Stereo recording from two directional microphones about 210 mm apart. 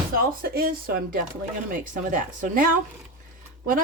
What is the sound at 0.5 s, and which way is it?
Speech, 45° right (ahead or behind).